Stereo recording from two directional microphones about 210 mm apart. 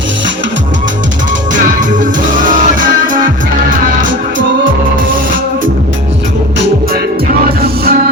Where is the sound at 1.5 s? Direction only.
40° right (ahead or behind).